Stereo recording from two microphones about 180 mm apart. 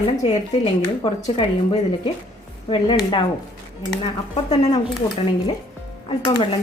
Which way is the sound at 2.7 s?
25° left (ahead or behind).